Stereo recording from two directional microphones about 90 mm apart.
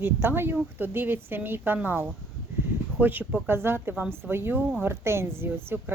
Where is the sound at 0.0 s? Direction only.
25° right (ahead or behind).